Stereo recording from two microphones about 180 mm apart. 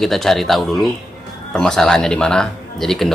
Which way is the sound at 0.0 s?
Centre (ahead or behind).